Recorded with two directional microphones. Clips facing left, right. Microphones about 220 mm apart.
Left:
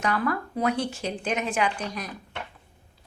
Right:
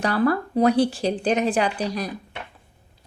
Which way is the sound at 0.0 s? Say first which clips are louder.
Right 6 dB; 35° right (ahead or behind).